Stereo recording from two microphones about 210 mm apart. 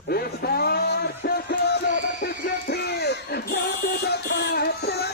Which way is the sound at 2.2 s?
50° left (ahead or behind).